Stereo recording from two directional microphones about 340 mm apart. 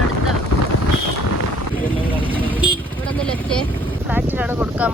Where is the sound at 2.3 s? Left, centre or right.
Centre.